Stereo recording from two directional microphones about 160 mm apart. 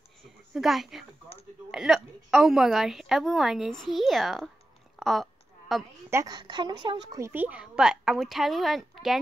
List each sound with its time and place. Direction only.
0.6 s a woman's voice: centre (ahead or behind)
4.9 s a sound: centre (ahead or behind)
6.0 s speech: 20° right (ahead or behind)
7.2 s a woman's voice: 15° right (ahead or behind)